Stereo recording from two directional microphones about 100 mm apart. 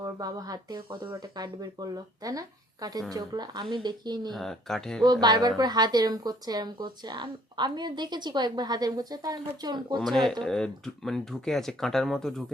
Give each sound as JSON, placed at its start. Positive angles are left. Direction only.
{"t": 0.0, "sound": "a woman's voice", "side_deg": -40}
{"t": 4.3, "sound": "speech", "side_deg": 5}
{"t": 5.0, "sound": "a woman's voice", "side_deg": -45}
{"t": 10.1, "sound": "speech", "side_deg": 5}